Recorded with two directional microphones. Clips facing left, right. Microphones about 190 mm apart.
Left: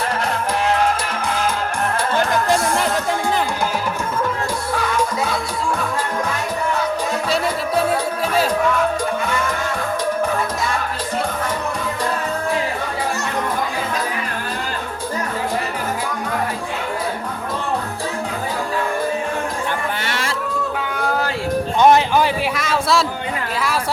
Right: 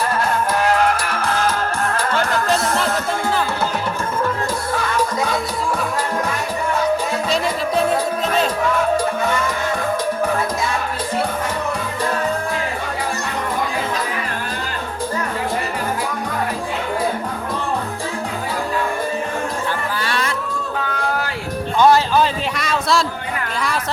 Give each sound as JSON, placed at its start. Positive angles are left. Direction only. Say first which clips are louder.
{"t": 1.1, "sound": "music", "louder": "right 1 dB", "side_deg": 15}
{"t": 20.0, "sound": "music", "louder": "right 2 dB", "side_deg": 25}
{"t": 21.8, "sound": "music", "louder": "even", "side_deg": 20}
{"t": 22.5, "sound": "a sound", "louder": "left 1 dB", "side_deg": 0}